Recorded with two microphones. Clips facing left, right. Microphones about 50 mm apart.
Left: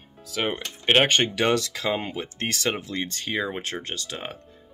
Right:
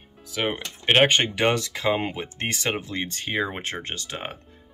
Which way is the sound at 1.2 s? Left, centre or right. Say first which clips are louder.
Even; centre.